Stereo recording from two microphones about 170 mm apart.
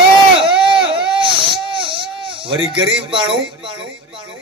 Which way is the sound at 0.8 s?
30° right (ahead or behind).